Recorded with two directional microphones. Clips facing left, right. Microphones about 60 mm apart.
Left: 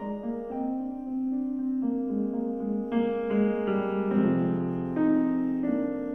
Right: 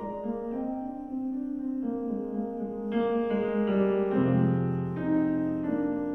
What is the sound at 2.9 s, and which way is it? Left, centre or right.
Music, centre.